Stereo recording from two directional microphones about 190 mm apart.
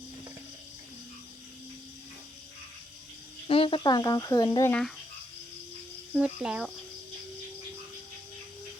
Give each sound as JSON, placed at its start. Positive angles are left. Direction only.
{"t": 3.4, "sound": "speech", "side_deg": 30}
{"t": 6.1, "sound": "speech", "side_deg": -5}